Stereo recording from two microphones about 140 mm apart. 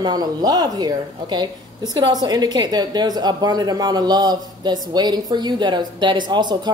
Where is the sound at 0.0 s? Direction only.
30° right (ahead or behind).